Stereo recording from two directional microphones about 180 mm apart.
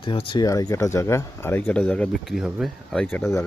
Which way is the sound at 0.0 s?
30° left (ahead or behind).